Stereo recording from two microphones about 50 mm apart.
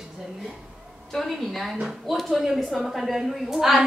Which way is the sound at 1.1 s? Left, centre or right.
Centre.